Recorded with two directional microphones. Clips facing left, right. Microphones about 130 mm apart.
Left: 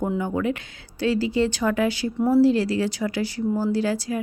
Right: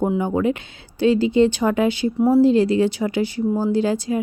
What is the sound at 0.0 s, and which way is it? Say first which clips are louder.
A woman's voice: right 5 dB; 20° right (ahead or behind).